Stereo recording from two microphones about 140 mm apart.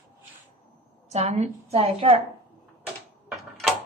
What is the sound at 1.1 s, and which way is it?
A woman's voice, 50° right (ahead or behind).